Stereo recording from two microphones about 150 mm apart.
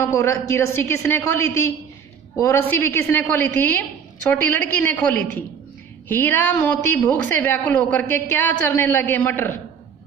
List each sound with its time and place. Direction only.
0.0 s a woman's voice: 20° left (ahead or behind)